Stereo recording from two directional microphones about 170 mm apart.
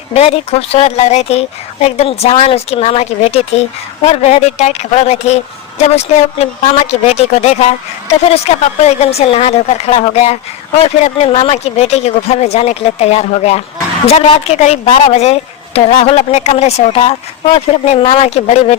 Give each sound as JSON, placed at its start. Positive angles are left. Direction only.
{"t": 0.1, "sound": "speech", "side_deg": 40}